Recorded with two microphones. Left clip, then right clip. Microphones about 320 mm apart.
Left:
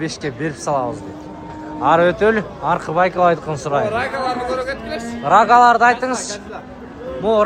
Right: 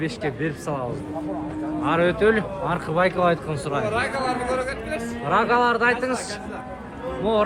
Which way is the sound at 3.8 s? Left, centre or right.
Left.